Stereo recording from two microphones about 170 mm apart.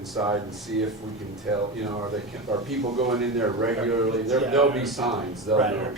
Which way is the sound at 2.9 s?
Centre (ahead or behind).